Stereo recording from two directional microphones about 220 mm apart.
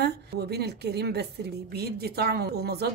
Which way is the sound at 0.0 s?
45° right (ahead or behind).